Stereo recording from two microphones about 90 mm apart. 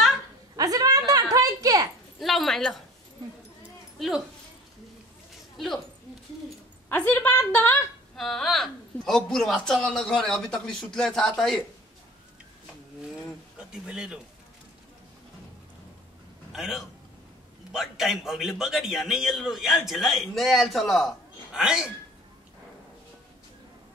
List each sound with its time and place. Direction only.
0.6 s a sound: 40° right (ahead or behind)
2.1 s dog: centre (ahead or behind)
6.9 s a woman's voice: 20° left (ahead or behind)
8.2 s a man's voice: centre (ahead or behind)
13.6 s speech: 10° right (ahead or behind)
16.5 s a man's voice: 5° right (ahead or behind)
21.5 s speech: 10° right (ahead or behind)